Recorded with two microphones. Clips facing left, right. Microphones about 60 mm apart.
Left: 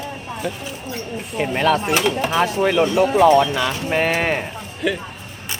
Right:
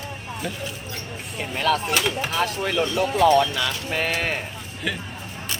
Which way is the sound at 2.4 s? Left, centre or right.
Left.